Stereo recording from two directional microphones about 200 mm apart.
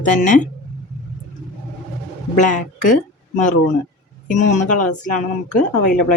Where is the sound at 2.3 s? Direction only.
40° left (ahead or behind).